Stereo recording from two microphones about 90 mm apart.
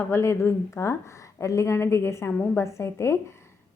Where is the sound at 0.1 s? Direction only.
30° left (ahead or behind).